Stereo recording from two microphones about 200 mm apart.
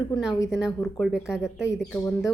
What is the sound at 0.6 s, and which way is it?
Speech, centre (ahead or behind).